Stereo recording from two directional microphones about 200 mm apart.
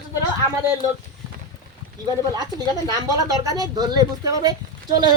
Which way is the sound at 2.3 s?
20° right (ahead or behind).